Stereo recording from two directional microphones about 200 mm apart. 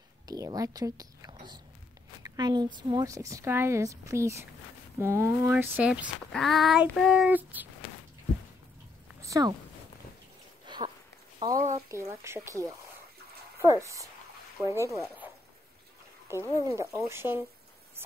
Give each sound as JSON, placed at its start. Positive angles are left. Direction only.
{"t": 0.3, "sound": "speech", "side_deg": -20}
{"t": 1.3, "sound": "whispering", "side_deg": -20}
{"t": 2.2, "sound": "speech", "side_deg": -20}
{"t": 6.3, "sound": "child singing", "side_deg": 0}
{"t": 9.2, "sound": "a sound", "side_deg": -15}
{"t": 10.7, "sound": "a sound", "side_deg": -20}
{"t": 11.6, "sound": "speech", "side_deg": -15}
{"t": 16.5, "sound": "speech", "side_deg": -15}